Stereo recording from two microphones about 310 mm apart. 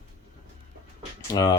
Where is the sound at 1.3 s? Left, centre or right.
Centre.